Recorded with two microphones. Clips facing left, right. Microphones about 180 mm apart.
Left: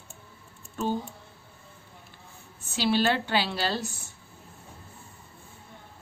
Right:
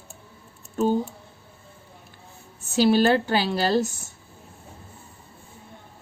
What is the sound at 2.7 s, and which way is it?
A woman's voice, 45° right (ahead or behind).